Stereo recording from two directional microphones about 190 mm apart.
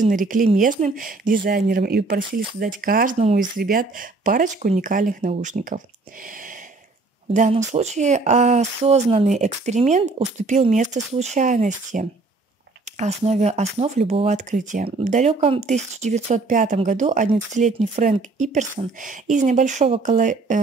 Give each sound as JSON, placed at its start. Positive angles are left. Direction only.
{"t": 0.0, "sound": "speech", "side_deg": -45}
{"t": 3.2, "sound": "speech", "side_deg": -35}
{"t": 3.5, "sound": "speech", "side_deg": -50}
{"t": 7.3, "sound": "speech", "side_deg": -40}